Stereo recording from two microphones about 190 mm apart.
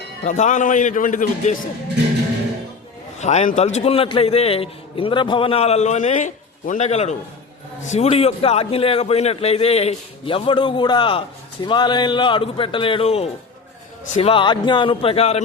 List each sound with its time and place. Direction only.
0.3 s a man's voice: 40° left (ahead or behind)
3.2 s a man's voice: 35° left (ahead or behind)